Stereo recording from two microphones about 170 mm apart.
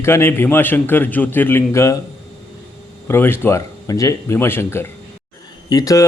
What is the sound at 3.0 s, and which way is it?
Speech, 15° left (ahead or behind).